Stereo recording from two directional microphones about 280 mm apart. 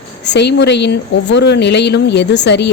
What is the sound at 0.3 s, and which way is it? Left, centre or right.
A woman's voice, left.